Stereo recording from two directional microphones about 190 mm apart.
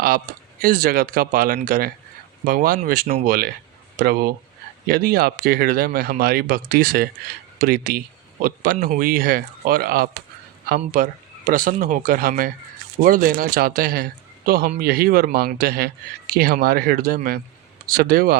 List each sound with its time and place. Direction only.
0.3 s a man's voice: 50° right (ahead or behind)